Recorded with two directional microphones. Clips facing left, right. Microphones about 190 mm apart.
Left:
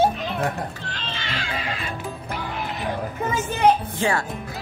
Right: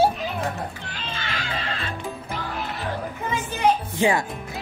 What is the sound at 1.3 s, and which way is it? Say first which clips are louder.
Music: left 2 dB; 10° left (ahead or behind).